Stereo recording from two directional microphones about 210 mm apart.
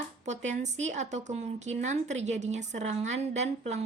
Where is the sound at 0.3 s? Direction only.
35° right (ahead or behind).